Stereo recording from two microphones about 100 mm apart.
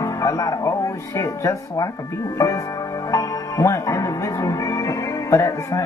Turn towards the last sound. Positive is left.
turn(degrees=30)  # may be behind; listen again after turning